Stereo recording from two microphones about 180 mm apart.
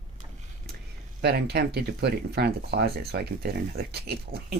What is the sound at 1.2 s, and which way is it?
Speech, 65° right (ahead or behind).